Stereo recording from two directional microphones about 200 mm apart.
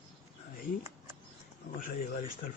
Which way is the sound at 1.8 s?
40° left (ahead or behind).